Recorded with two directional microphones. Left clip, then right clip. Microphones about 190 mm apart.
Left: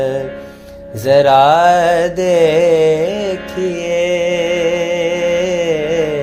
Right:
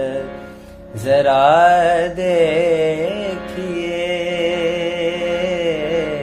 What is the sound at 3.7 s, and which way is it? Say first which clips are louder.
Music: left 5 dB; 40° left (ahead or behind).